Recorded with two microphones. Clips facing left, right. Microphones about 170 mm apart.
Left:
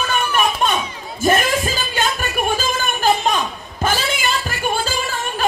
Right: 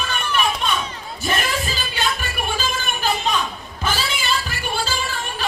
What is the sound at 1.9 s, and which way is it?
Music, 45° left (ahead or behind).